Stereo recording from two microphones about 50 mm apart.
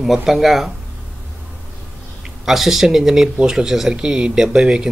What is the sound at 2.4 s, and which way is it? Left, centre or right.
Speech, centre.